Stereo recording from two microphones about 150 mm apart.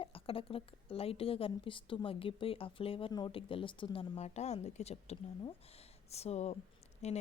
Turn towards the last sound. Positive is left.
turn(degrees=45)  # may be behind; listen again after turning